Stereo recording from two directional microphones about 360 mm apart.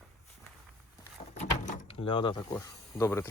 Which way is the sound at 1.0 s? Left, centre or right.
Centre.